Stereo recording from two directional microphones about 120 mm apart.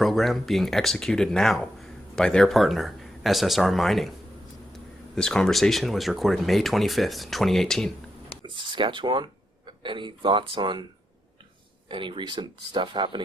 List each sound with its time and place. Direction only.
0.0 s speech: centre (ahead or behind)
5.1 s speech: 5° left (ahead or behind)
8.4 s speech: 40° right (ahead or behind)
11.9 s speech: 45° right (ahead or behind)